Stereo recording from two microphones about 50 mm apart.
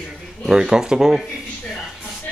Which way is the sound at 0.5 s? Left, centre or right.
Centre.